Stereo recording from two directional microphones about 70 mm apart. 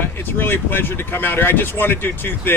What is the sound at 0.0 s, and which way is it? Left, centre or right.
Speech, left.